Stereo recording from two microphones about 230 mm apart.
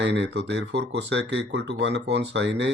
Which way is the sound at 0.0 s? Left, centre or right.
Right.